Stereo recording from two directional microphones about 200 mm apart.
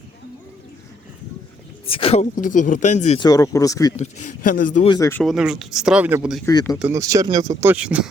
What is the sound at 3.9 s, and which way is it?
Speech, 35° left (ahead or behind).